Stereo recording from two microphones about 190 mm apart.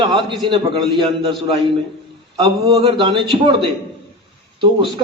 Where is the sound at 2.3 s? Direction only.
30° right (ahead or behind).